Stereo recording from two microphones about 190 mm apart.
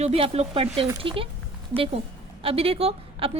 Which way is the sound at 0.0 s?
35° right (ahead or behind).